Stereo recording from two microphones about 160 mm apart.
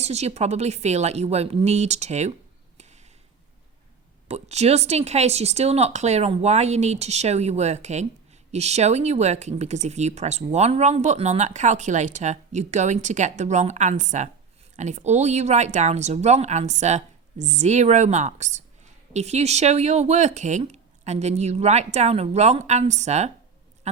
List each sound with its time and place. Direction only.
0.0 s speech: 45° right (ahead or behind)
4.3 s speech: 45° right (ahead or behind)